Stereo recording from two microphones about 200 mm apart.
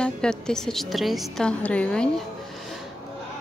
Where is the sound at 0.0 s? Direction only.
5° left (ahead or behind).